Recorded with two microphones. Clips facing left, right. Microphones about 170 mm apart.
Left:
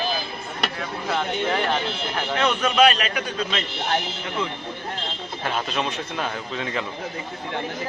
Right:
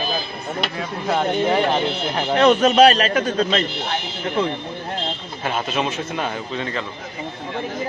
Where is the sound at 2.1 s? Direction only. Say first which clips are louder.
Right 8 dB; 35° right (ahead or behind).